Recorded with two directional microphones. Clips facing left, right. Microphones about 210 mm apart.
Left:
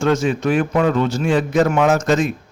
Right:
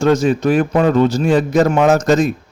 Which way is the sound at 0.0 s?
40° right (ahead or behind).